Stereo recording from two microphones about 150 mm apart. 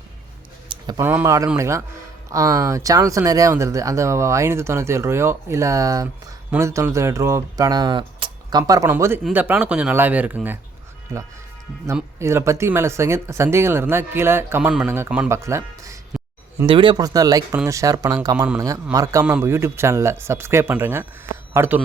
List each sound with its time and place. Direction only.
0.7 s a sound: 25° right (ahead or behind)
1.0 s speech: 15° right (ahead or behind)
12.2 s speech: 20° right (ahead or behind)
16.6 s speech: 35° right (ahead or behind); by 21.8 s 15° right (ahead or behind)